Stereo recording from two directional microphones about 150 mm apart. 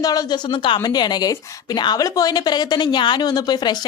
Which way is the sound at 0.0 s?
25° left (ahead or behind).